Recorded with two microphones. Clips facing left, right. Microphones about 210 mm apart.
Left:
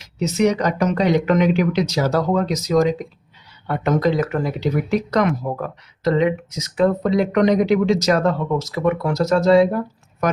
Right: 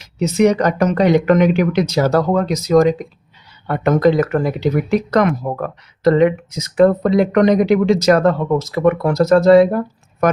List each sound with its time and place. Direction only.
0.0 s speech: 55° right (ahead or behind)